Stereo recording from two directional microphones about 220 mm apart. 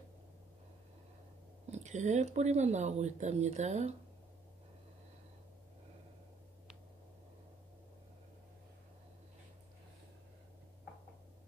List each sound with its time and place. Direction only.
1.7 s speech: 30° right (ahead or behind)